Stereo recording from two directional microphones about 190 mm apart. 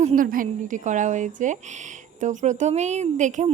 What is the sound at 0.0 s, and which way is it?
Speech, 40° right (ahead or behind).